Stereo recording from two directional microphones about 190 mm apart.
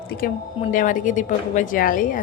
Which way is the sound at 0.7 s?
45° left (ahead or behind).